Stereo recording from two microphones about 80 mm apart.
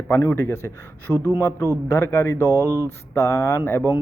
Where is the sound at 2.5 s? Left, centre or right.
Right.